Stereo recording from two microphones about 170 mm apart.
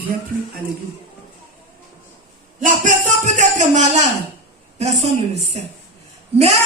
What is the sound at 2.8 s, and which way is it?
Music, 45° right (ahead or behind).